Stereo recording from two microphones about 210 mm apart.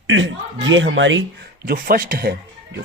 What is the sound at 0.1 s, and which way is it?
A man's voice, 60° right (ahead or behind).